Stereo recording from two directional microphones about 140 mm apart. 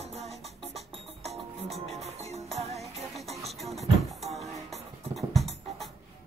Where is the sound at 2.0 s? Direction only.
50° right (ahead or behind).